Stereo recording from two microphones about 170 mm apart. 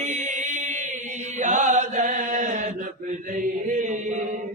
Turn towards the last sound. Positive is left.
turn(degrees=-45)  # may be behind; listen again after turning